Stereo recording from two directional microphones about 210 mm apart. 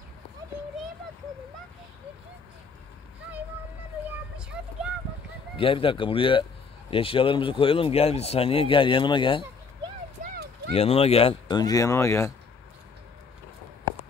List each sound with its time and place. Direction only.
4.6 s speech: 5° right (ahead or behind)
5.6 s speech: 25° left (ahead or behind)
10.2 s a sound: 45° right (ahead or behind)
10.7 s speech: 30° left (ahead or behind); by 12.4 s 15° left (ahead or behind)